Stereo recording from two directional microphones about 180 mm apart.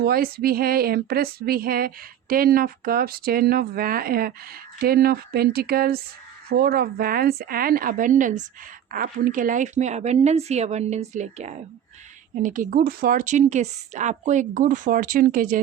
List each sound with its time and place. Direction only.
0.0 s speech: 55° right (ahead or behind)